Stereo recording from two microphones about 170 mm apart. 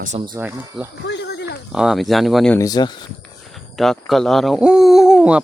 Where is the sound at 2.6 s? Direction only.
20° left (ahead or behind).